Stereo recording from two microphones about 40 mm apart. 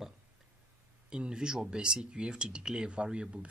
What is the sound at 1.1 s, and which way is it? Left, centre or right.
Speech, right.